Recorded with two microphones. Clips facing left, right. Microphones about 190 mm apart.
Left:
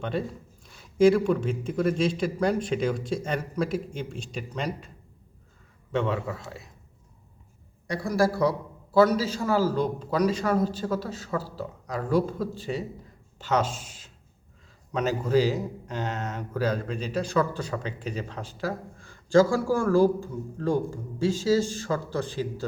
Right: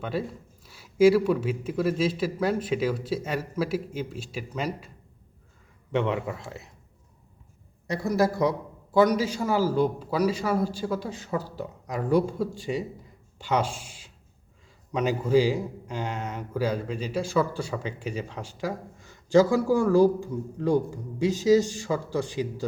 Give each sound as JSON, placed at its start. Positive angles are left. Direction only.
{"t": 0.0, "sound": "speech", "side_deg": -5}
{"t": 5.9, "sound": "speech", "side_deg": -15}
{"t": 7.9, "sound": "speech", "side_deg": -20}